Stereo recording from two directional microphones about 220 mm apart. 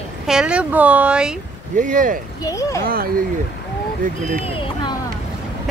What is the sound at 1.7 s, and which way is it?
Speech, 35° right (ahead or behind).